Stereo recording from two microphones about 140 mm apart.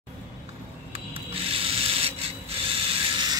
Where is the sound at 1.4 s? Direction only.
45° right (ahead or behind).